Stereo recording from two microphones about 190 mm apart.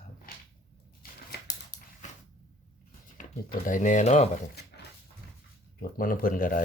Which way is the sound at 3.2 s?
45° left (ahead or behind).